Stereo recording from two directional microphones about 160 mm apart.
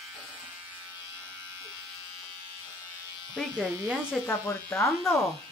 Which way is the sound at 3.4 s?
Centre (ahead or behind).